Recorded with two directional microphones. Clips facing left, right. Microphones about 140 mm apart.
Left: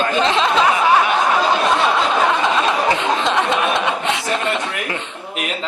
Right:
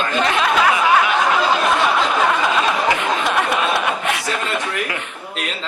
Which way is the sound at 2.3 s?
25° left (ahead or behind).